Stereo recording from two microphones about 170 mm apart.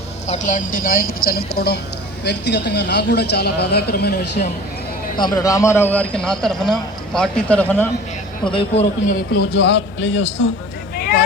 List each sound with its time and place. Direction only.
0.3 s a woman's voice: 45° left (ahead or behind); by 1.8 s 70° left (ahead or behind)
2.2 s speech: 80° left
5.1 s a man's voice: 25° left (ahead or behind); by 7.9 s 10° left (ahead or behind)
8.4 s a man's voice: 35° left (ahead or behind)
9.3 s a man's voice: 70° left (ahead or behind); by 10.5 s 90° left